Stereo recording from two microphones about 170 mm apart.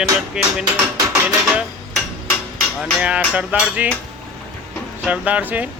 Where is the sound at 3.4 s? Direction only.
10° right (ahead or behind).